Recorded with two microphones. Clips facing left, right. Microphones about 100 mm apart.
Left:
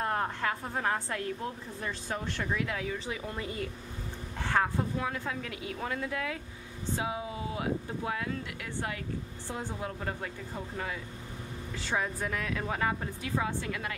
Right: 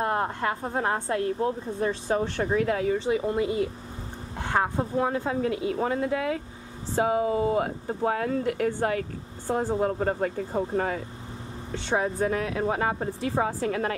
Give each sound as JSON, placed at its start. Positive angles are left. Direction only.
{"t": 0.0, "sound": "a woman's voice", "side_deg": -30}
{"t": 4.9, "sound": "speech", "side_deg": -35}
{"t": 7.0, "sound": "speech", "side_deg": -50}
{"t": 11.7, "sound": "speech", "side_deg": -30}